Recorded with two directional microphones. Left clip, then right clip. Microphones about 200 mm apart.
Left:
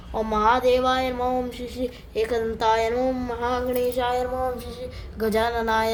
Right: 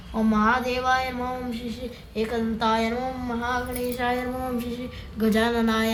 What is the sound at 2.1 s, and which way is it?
A woman's voice, 60° left (ahead or behind).